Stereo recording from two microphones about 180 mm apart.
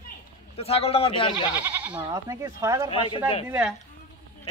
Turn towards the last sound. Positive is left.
turn(degrees=-5)  # may be behind; listen again after turning